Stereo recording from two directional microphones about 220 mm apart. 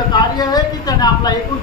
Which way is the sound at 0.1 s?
15° left (ahead or behind).